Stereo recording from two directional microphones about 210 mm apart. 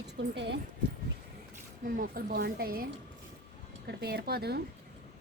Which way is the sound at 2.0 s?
45° right (ahead or behind).